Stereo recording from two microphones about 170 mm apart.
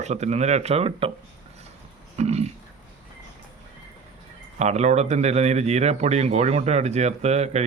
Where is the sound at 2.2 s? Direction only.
40° right (ahead or behind).